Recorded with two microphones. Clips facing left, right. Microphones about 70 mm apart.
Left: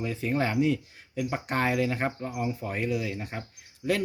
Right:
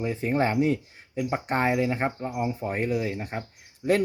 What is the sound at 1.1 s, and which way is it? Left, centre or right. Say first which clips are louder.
Speech: right 3 dB; right.